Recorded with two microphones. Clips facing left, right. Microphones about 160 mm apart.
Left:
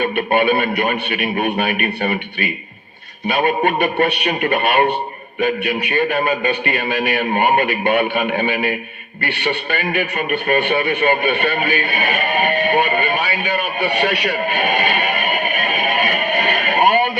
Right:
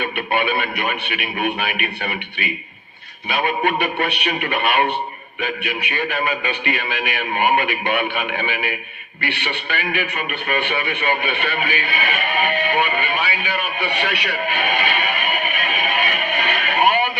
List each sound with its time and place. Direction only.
0.0 s a man's voice: 45° left (ahead or behind)